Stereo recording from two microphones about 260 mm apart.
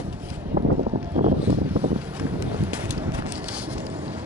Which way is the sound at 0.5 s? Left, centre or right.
Right.